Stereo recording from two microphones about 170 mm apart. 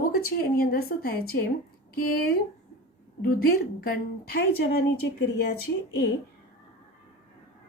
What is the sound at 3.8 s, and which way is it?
A woman's voice, 60° left (ahead or behind).